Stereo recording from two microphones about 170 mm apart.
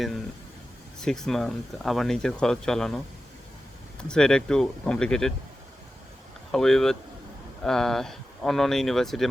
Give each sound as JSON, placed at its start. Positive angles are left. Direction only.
{"t": 1.0, "sound": "speech", "side_deg": 5}
{"t": 4.1, "sound": "speech", "side_deg": 5}
{"t": 6.5, "sound": "speech", "side_deg": 5}